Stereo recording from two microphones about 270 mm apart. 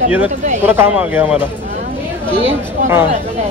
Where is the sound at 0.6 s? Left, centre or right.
Centre.